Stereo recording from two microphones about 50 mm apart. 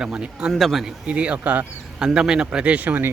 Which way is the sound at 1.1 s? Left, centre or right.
Right.